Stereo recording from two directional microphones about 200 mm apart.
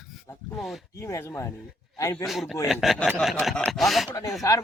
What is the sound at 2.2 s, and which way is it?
Chopping, centre (ahead or behind).